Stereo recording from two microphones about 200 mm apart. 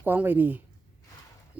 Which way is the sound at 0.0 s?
10° right (ahead or behind).